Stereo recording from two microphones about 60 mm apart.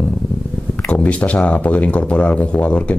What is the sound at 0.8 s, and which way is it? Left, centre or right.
Speech, left.